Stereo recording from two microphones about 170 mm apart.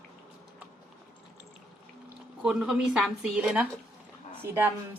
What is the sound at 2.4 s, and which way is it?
A woman's voice, 5° right (ahead or behind).